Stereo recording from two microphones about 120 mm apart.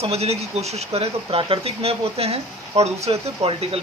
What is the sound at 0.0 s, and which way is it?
Speech, 60° right (ahead or behind).